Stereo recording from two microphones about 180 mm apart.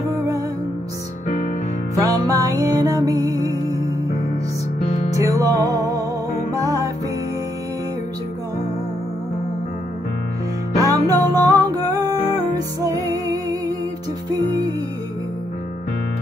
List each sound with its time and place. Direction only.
2.0 s music: 20° right (ahead or behind)
4.8 s music: 35° left (ahead or behind)
5.1 s music: 20° right (ahead or behind)
10.7 s music: 20° right (ahead or behind)